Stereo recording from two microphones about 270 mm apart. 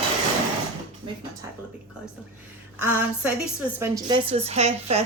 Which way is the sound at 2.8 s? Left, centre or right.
Centre.